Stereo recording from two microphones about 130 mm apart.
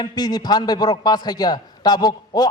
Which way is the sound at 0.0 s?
30° left (ahead or behind).